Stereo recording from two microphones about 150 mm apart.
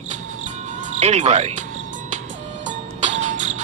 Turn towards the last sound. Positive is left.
turn(degrees=-55)  # may be behind; listen again after turning